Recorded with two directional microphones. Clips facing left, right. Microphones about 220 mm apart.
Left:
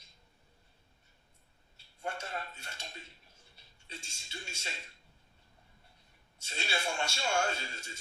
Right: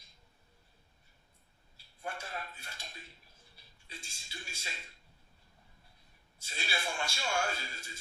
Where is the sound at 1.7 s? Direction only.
25° left (ahead or behind).